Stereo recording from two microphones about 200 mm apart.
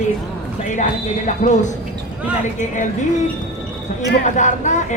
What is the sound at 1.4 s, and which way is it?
Speech, 40° left (ahead or behind).